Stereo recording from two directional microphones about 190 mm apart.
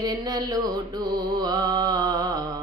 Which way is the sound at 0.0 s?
20° right (ahead or behind).